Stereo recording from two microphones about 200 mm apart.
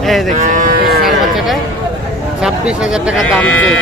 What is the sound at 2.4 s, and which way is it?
Speech, 5° right (ahead or behind).